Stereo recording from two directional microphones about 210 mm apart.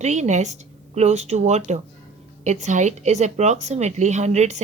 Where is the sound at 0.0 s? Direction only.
35° right (ahead or behind).